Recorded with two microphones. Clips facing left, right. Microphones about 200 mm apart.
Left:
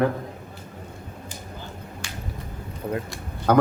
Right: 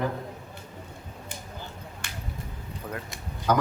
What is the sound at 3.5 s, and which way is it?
Speech, 55° left (ahead or behind).